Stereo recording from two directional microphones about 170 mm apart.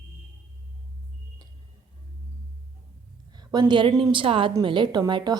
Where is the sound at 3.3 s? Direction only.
25° right (ahead or behind).